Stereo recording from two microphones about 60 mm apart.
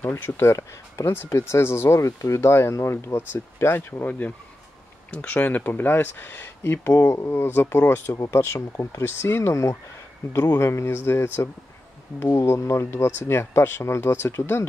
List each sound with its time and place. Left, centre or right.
0.2 s speech: left
2.0 s speech: left